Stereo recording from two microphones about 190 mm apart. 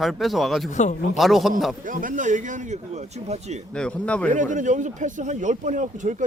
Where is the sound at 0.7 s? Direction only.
40° left (ahead or behind).